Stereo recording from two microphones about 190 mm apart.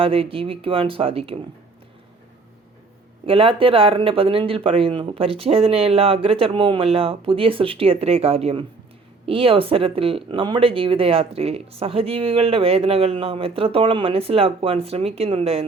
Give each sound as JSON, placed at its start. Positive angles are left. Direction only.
{"t": 0.0, "sound": "speech", "side_deg": -30}
{"t": 3.2, "sound": "speech", "side_deg": -30}